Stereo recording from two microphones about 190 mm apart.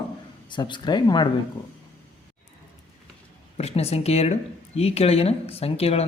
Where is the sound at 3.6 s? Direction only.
35° left (ahead or behind).